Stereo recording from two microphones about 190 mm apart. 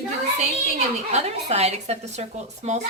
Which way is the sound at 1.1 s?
35° right (ahead or behind).